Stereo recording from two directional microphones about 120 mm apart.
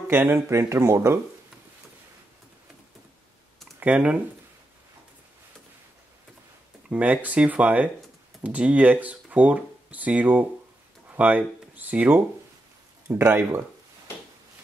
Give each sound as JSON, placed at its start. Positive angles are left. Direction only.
{"t": 0.1, "sound": "speech", "side_deg": -20}
{"t": 3.8, "sound": "speech", "side_deg": -10}
{"t": 6.9, "sound": "speech", "side_deg": -10}